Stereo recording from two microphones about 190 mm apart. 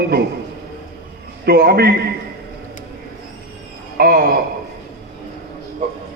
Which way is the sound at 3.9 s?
50° right (ahead or behind).